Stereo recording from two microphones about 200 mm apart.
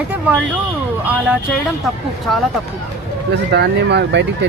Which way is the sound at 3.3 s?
55° right (ahead or behind).